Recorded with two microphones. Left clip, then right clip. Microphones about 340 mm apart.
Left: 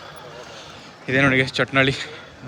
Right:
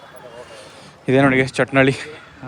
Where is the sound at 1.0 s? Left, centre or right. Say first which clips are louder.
Right 3 dB; centre.